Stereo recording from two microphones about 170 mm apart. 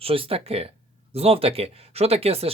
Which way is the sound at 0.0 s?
35° right (ahead or behind).